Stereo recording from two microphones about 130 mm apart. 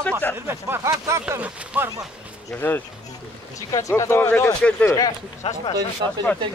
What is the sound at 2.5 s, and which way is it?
Speech, 15° left (ahead or behind).